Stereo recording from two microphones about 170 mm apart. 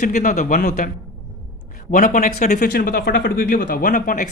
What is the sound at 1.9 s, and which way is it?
Speech, 50° left (ahead or behind).